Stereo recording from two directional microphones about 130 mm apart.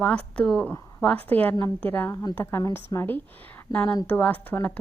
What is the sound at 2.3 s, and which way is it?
A woman's voice, 15° left (ahead or behind).